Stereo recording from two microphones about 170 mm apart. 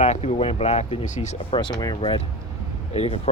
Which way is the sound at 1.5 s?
30° left (ahead or behind).